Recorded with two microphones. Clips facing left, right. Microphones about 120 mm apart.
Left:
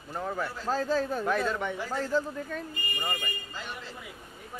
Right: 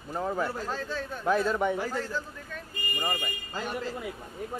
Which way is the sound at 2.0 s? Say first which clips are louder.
Left 5 dB; 35° left (ahead or behind).